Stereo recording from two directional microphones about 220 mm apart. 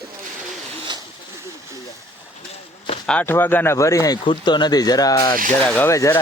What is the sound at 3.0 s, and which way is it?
Speech, 5° left (ahead or behind).